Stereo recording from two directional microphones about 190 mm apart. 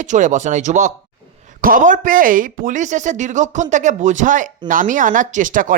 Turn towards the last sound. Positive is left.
turn(degrees=-45)  # may be behind; listen again after turning